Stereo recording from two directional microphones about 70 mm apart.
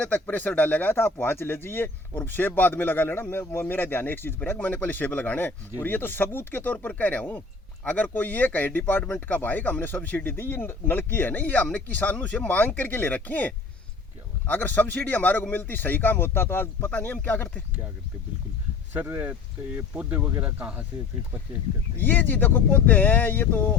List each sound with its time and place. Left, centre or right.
0.0 s speech: left
16.9 s speech: left
18.9 s speech: right
21.9 s speech: left